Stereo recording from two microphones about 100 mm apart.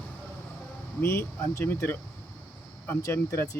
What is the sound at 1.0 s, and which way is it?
Speech, 25° left (ahead or behind).